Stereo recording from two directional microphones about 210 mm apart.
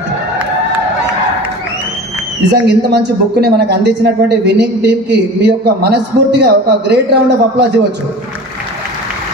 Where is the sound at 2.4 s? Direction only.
50° right (ahead or behind).